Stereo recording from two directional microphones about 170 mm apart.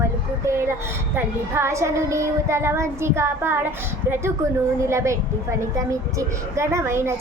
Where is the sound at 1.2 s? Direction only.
15° right (ahead or behind).